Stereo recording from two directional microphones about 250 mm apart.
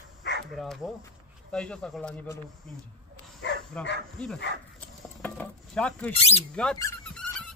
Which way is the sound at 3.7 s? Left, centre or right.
Centre.